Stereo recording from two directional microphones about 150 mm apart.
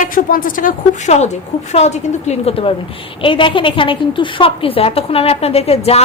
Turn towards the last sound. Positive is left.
turn(degrees=45)  # may be behind; listen again after turning